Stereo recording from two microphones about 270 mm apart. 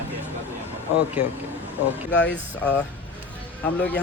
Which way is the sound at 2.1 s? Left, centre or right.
Left.